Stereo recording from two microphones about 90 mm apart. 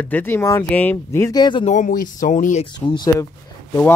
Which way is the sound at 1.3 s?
55° left (ahead or behind).